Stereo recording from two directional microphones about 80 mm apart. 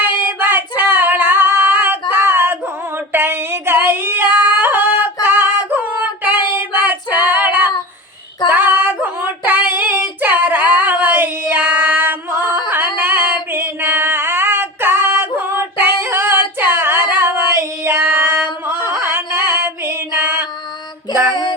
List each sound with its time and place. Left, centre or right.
0.0 s child singing: right
0.9 s female singing: right
6.2 s child singing: right
12.5 s female singing: right
17.8 s child singing: right
18.4 s carnatic music: left
19.0 s music: right